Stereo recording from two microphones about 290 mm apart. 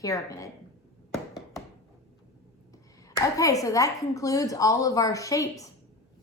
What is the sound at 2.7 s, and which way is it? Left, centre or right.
Speech, centre.